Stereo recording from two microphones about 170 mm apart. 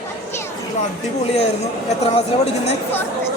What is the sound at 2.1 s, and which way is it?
Speech, 40° left (ahead or behind).